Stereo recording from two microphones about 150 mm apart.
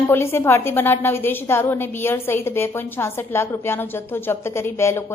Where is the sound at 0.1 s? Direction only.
15° left (ahead or behind).